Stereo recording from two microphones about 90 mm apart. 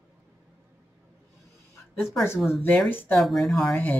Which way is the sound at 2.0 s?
Centre (ahead or behind).